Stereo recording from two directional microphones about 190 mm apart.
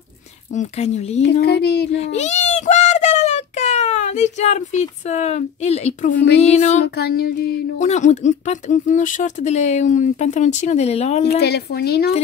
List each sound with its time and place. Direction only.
0.5 s speech: 40° left (ahead or behind)
1.4 s a woman's voice: 60° left (ahead or behind)
2.0 s speech: 35° left (ahead or behind)
7.0 s a sound: 55° left (ahead or behind)
7.8 s speech: 40° left (ahead or behind)
11.4 s a woman's voice: 60° left (ahead or behind)